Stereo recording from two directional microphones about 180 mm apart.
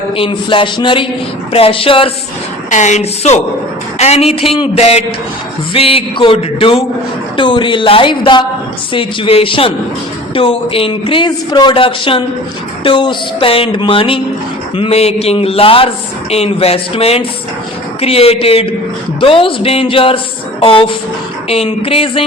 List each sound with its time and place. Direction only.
0.2 s a man's voice: 30° left (ahead or behind)
2.6 s a man's voice: 40° left (ahead or behind)